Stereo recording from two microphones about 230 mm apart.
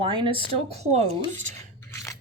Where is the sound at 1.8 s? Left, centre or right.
Centre.